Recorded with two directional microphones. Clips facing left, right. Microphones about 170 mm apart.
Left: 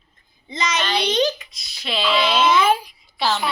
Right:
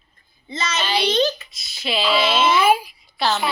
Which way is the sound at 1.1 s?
15° left (ahead or behind).